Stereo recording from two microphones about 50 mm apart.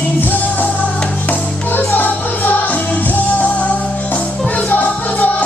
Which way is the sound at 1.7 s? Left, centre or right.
Left.